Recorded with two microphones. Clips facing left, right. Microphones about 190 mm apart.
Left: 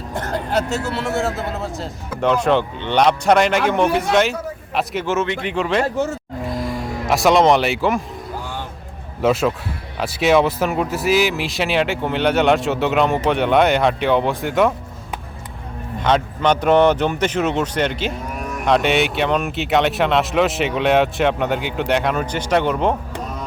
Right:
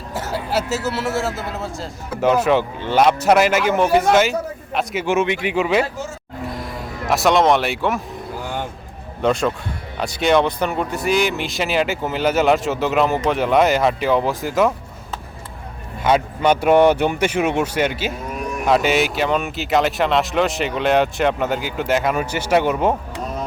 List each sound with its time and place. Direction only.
0.1 s speech: 5° right (ahead or behind)
5.0 s speech: 15° right (ahead or behind)
5.8 s speech: 60° left (ahead or behind)
6.5 s speech: centre (ahead or behind)
9.2 s speech: 5° left (ahead or behind)
16.0 s speech: 10° right (ahead or behind)